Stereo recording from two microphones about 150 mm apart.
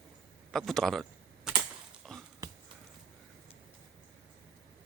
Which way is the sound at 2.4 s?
25° right (ahead or behind).